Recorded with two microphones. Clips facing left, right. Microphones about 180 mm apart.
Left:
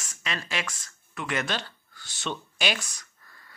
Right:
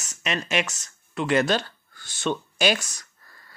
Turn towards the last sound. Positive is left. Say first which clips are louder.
# right 7 dB
turn(degrees=-40)  # may be behind; listen again after turning